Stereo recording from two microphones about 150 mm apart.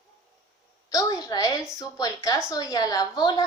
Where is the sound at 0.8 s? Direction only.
25° left (ahead or behind).